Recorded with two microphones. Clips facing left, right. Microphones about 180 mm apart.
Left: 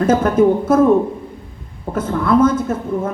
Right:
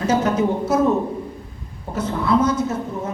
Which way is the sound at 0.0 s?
50° left (ahead or behind).